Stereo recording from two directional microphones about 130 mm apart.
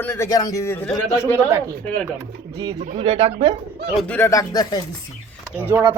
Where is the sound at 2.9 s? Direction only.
40° right (ahead or behind).